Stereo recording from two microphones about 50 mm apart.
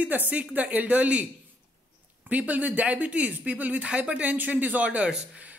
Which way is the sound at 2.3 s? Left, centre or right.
Right.